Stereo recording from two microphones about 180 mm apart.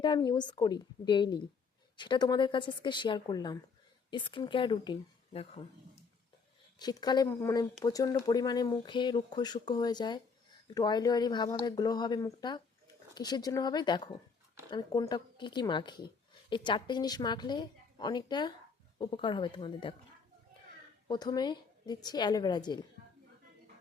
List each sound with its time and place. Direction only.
0.0 s speech: 25° left (ahead or behind)
6.7 s speech: 25° left (ahead or behind)
21.1 s speech: 25° left (ahead or behind)